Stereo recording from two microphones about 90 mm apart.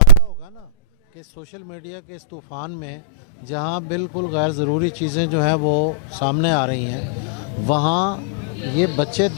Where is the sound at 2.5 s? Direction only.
20° left (ahead or behind).